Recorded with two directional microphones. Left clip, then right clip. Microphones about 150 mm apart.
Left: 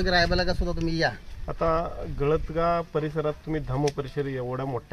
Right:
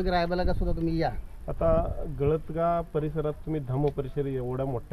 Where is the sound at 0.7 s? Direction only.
30° right (ahead or behind).